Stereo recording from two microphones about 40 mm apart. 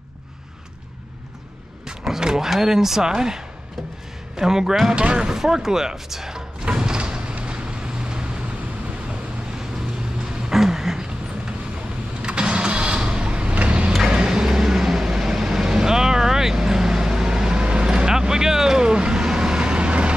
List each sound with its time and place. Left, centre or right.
1.9 s speech: centre
4.9 s speech: right
5.3 s speech: centre
6.6 s vehicle: right
10.5 s a sound: centre
12.2 s vehicle: right
14.0 s vehicle: centre